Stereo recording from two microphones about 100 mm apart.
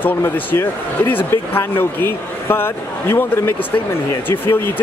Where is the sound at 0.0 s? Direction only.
20° left (ahead or behind).